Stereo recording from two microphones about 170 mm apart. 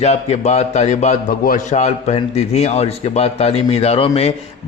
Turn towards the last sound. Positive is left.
turn(degrees=35)  # may be behind; listen again after turning